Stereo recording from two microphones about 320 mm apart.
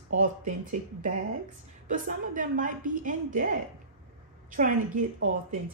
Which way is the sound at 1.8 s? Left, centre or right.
Right.